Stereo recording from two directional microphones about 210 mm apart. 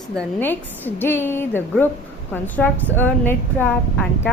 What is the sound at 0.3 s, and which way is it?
A woman's voice, 10° left (ahead or behind).